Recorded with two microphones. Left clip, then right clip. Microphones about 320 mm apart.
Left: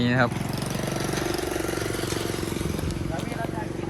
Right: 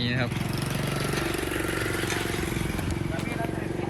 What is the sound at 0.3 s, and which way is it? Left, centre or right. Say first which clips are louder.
Vehicle: left 1 dB; left.